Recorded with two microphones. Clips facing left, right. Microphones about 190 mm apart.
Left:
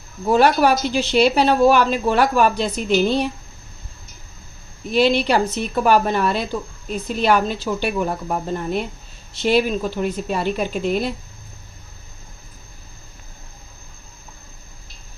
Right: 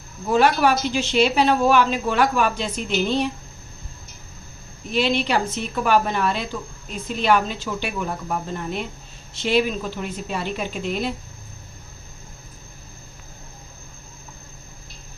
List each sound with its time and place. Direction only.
0.3 s speech: 40° left (ahead or behind)
4.9 s speech: 40° left (ahead or behind)